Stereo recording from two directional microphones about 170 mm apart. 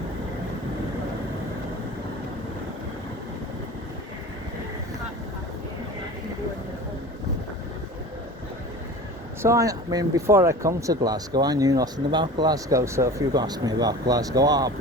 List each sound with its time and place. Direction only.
9.4 s speech: 15° right (ahead or behind)